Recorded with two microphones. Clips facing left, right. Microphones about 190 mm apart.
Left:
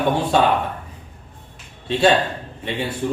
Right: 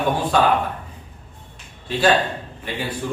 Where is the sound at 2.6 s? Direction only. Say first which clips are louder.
Left 3 dB; 25° left (ahead or behind).